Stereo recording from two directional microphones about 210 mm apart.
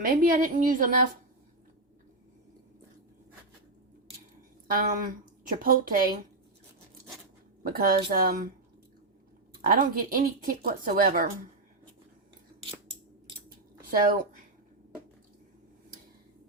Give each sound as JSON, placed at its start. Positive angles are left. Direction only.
{"t": 0.0, "sound": "a woman's voice", "side_deg": -40}
{"t": 4.7, "sound": "speech", "side_deg": -45}
{"t": 7.6, "sound": "speech", "side_deg": -45}
{"t": 9.6, "sound": "speech", "side_deg": -45}
{"t": 13.8, "sound": "speech", "side_deg": -45}